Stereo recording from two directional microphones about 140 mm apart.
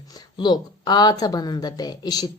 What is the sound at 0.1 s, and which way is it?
Speech, 30° left (ahead or behind).